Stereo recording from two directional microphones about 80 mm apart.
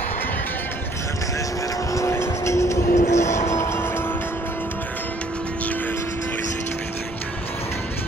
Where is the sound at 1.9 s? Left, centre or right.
Left.